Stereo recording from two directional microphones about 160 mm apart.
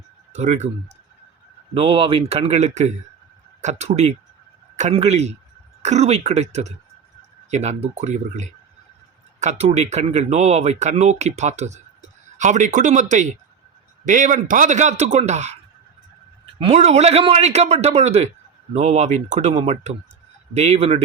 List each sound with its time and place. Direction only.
0.3 s speech: 45° right (ahead or behind)
1.7 s a man's voice: 35° right (ahead or behind)
16.6 s a man's voice: 40° right (ahead or behind)